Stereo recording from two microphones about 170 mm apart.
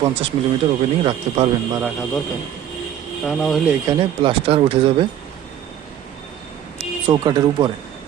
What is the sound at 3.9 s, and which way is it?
Speech, 30° right (ahead or behind).